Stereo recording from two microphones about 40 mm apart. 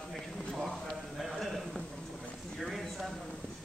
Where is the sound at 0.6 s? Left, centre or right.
Centre.